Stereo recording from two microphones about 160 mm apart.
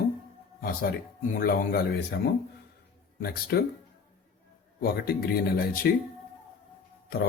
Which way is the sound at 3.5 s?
85° left.